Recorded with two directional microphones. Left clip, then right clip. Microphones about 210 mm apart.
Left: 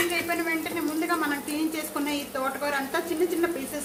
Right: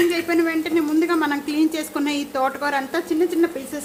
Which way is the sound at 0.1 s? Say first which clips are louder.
Right 6 dB; 50° right (ahead or behind).